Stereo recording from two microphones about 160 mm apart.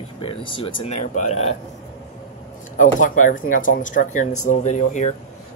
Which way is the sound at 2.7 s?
50° left (ahead or behind).